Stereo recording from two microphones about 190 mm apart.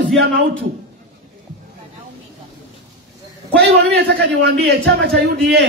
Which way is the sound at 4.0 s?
60° right (ahead or behind).